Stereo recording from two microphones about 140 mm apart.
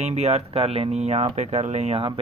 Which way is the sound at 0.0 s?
50° right (ahead or behind).